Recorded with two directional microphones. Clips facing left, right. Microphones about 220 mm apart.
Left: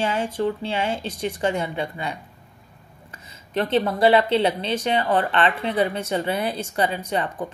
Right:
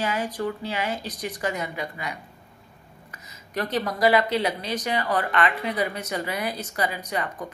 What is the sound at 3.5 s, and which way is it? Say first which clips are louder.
Speech: left 5 dB; 25° left (ahead or behind).